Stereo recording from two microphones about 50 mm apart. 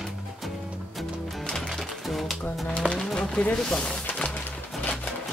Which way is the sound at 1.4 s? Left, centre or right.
Centre.